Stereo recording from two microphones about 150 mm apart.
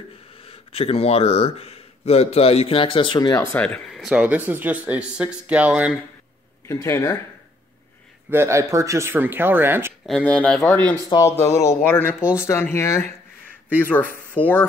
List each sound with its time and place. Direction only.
0.4 s speech: 40° left (ahead or behind)
3.5 s speech: 5° left (ahead or behind)
6.6 s speech: 20° left (ahead or behind)
8.3 s speech: 20° right (ahead or behind)
10.0 s speech: 5° left (ahead or behind)
11.1 s speech: 20° left (ahead or behind)
14.3 s speech: 10° left (ahead or behind)